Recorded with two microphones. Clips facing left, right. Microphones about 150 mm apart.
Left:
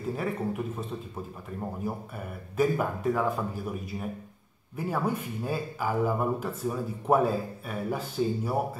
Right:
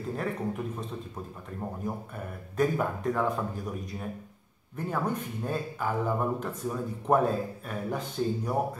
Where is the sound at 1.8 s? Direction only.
5° left (ahead or behind).